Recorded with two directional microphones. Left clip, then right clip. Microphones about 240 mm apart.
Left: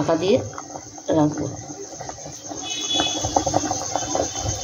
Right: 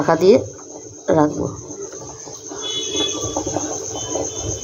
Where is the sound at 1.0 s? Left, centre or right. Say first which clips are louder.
Right 4 dB; centre.